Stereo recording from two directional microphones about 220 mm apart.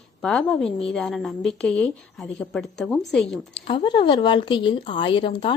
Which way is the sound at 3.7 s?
20° left (ahead or behind).